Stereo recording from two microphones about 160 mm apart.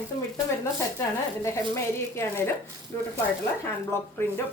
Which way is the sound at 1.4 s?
15° left (ahead or behind).